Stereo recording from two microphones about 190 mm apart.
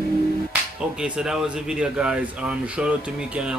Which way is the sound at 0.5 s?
5° right (ahead or behind).